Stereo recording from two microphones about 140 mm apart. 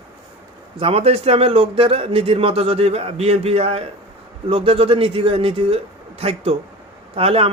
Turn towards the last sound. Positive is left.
turn(degrees=-45)  # may be behind; listen again after turning